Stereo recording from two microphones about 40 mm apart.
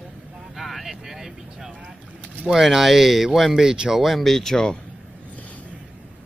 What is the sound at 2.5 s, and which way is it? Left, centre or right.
Speech, centre.